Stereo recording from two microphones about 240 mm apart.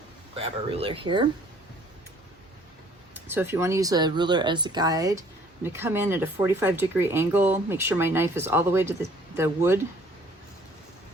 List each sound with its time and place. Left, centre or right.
0.4 s speech: right
3.2 s speech: centre